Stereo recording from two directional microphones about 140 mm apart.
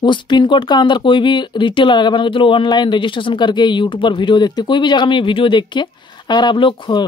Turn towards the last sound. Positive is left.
turn(degrees=35)  # may be behind; listen again after turning